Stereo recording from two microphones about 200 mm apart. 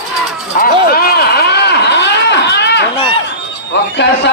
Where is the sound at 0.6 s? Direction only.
50° left (ahead or behind).